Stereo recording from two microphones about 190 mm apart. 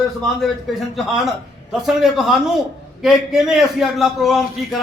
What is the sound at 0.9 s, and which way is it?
A man's voice, centre (ahead or behind).